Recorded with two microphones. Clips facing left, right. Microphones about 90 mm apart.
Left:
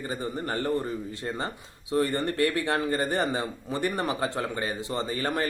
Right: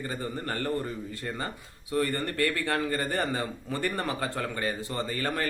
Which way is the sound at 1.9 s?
20° left (ahead or behind).